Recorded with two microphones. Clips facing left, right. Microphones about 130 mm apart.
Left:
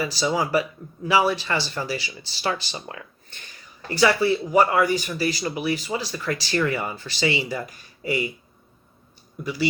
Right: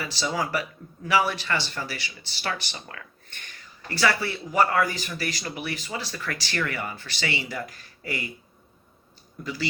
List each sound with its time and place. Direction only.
0.2 s speech: 25° left (ahead or behind)
3.8 s speech: 20° left (ahead or behind)
9.4 s speech: 15° left (ahead or behind)